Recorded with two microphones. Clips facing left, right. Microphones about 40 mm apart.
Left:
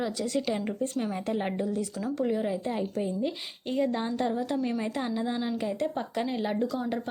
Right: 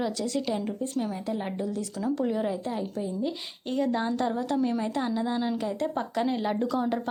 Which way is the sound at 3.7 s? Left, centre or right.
Centre.